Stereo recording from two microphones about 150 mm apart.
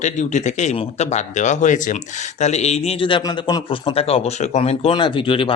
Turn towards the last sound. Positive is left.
turn(degrees=35)  # may be behind; listen again after turning